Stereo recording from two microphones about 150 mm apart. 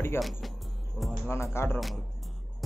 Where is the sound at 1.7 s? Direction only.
Centre (ahead or behind).